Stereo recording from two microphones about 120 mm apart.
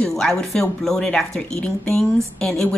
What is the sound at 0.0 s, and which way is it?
Speech, 5° left (ahead or behind).